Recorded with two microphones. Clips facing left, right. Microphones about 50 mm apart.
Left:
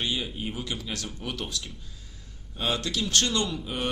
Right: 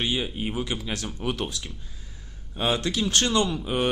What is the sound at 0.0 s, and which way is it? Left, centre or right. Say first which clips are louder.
Speech: right 3 dB; right.